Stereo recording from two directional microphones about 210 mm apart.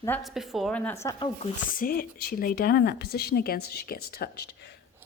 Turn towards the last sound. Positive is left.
turn(degrees=50)  # may be behind; listen again after turning